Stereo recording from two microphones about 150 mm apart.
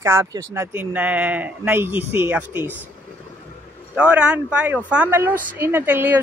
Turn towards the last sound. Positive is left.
turn(degrees=-10)  # may be behind; listen again after turning